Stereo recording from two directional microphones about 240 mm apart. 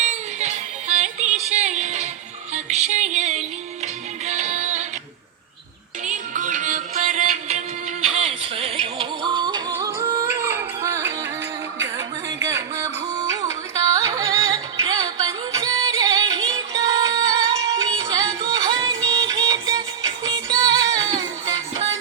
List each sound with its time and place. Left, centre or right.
0.0 s music: right
6.1 s music: right; by 11.3 s centre
11.8 s a sound: centre
13.1 s music: centre